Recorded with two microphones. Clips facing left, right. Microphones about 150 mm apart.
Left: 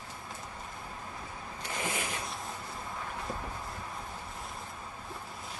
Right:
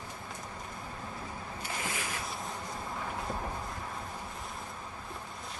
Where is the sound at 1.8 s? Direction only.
20° left (ahead or behind).